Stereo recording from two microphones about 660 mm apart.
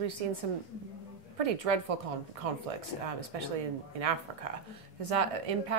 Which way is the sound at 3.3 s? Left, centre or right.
Right.